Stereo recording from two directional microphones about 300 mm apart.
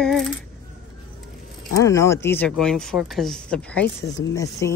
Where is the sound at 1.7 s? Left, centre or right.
Centre.